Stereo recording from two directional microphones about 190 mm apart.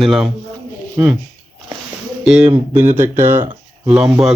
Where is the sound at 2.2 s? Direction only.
5° right (ahead or behind).